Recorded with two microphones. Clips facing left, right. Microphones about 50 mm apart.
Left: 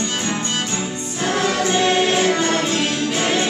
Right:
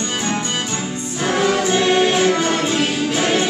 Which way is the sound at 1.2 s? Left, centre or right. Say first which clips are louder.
Right 2 dB; centre.